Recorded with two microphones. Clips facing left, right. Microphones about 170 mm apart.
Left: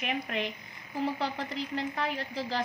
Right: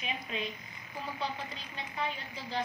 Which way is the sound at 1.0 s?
90° left.